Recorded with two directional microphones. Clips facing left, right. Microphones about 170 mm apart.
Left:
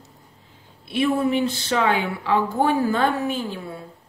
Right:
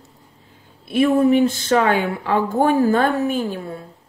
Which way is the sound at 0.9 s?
45° right (ahead or behind).